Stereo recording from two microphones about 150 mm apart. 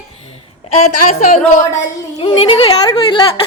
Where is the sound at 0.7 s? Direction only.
45° left (ahead or behind).